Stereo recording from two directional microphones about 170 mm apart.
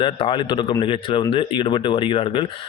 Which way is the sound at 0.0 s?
30° left (ahead or behind).